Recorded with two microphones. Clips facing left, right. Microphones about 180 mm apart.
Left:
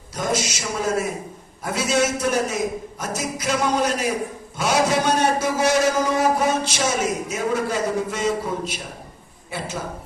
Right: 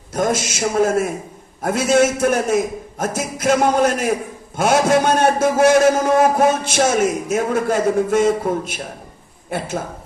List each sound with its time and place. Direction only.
0.1 s a man's voice: 50° right (ahead or behind)